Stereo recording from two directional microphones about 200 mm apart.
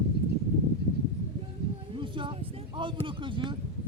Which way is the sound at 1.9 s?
25° right (ahead or behind).